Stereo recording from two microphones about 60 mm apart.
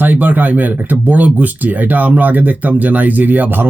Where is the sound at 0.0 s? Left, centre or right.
Right.